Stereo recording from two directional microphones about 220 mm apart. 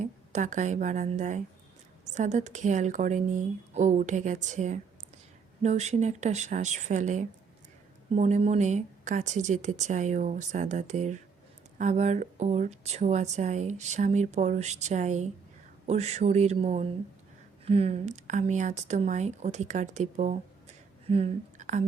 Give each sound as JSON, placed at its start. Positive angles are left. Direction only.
{"t": 0.0, "sound": "a woman's voice", "side_deg": -35}